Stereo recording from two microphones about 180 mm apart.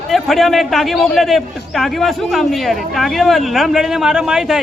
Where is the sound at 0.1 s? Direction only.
Centre (ahead or behind).